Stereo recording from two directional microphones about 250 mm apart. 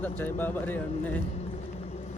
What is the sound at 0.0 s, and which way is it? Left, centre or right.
Speech, centre.